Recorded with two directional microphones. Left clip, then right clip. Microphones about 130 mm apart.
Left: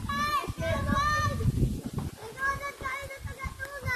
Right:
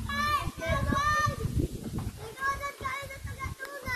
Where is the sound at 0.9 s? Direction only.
25° left (ahead or behind).